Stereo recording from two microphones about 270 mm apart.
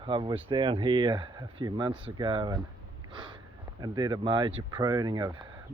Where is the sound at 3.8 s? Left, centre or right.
Centre.